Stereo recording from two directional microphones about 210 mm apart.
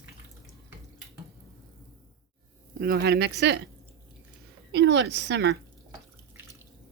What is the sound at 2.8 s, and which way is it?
Speech, 45° right (ahead or behind).